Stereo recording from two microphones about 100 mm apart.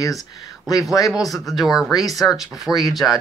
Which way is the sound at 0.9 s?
35° left (ahead or behind).